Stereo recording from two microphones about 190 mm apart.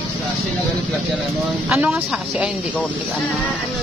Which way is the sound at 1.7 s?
5° right (ahead or behind).